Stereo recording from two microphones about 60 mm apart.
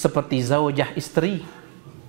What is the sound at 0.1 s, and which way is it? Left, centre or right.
A man's voice, right.